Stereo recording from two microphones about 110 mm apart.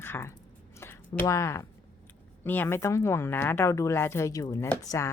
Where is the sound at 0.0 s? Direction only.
20° left (ahead or behind).